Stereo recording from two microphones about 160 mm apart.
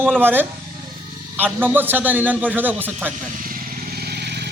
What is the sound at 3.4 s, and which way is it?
Motorcycle, 65° right (ahead or behind).